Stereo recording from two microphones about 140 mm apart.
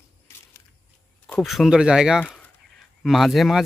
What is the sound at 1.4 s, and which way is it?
Speech, centre (ahead or behind).